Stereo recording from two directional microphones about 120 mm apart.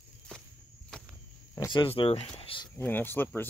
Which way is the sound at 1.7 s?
45° left (ahead or behind).